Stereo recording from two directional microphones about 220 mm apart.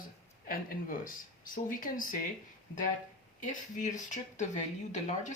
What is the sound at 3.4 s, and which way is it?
Speech, 35° left (ahead or behind).